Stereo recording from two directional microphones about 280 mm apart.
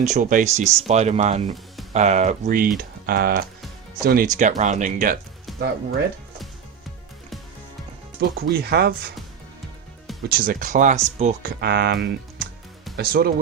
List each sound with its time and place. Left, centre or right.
0.0 s speech: right
5.5 s music: centre
8.2 s speech: right
10.2 s speech: right